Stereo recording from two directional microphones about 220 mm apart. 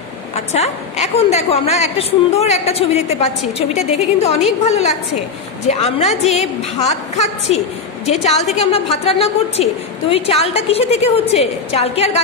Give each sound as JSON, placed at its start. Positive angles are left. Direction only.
{"t": 0.5, "sound": "a woman's voice", "side_deg": 30}